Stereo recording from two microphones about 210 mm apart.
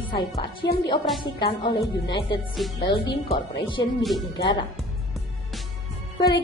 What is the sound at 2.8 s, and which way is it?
A woman's voice, 25° left (ahead or behind).